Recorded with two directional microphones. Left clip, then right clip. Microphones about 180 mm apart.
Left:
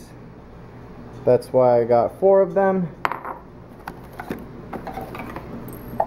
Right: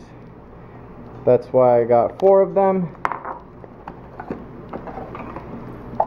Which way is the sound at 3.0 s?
35° left (ahead or behind).